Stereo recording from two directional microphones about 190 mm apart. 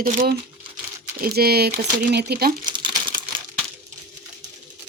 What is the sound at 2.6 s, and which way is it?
Crumpling, 25° right (ahead or behind).